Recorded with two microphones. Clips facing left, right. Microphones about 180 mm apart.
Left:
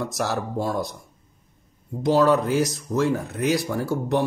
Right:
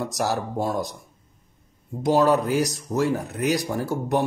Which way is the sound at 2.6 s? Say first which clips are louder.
Left 1 dB; 40° right (ahead or behind).